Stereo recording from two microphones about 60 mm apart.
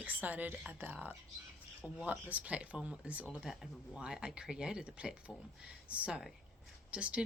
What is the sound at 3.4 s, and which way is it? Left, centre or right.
Speech, centre.